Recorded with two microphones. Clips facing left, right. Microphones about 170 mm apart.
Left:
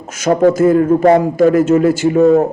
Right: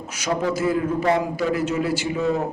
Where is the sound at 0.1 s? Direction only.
50° left (ahead or behind).